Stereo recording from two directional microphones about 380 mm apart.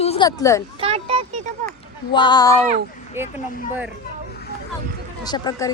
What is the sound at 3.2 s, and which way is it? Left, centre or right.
Speech, centre.